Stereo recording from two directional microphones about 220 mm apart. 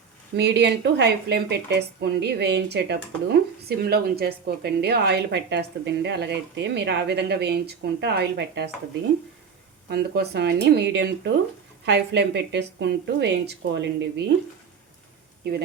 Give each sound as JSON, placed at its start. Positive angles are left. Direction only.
{"t": 0.3, "sound": "speech", "side_deg": -50}
{"t": 9.9, "sound": "speech", "side_deg": -50}